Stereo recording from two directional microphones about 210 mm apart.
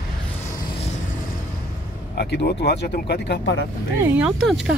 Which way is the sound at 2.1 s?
50° left (ahead or behind).